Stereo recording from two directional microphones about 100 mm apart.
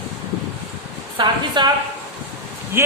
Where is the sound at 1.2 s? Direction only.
50° right (ahead or behind).